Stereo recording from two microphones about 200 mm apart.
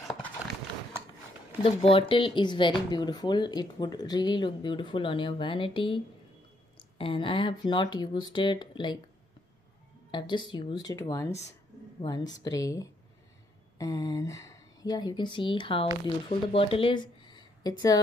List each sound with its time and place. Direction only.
1.6 s speech: 30° left (ahead or behind)
7.0 s speech: 25° left (ahead or behind)
10.1 s speech: 25° left (ahead or behind)